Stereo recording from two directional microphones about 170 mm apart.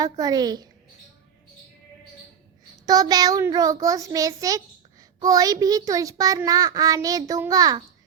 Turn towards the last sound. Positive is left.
turn(degrees=-20)  # may be behind; listen again after turning